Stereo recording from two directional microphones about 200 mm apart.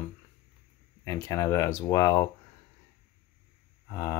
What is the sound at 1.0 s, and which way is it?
Speech, 15° left (ahead or behind).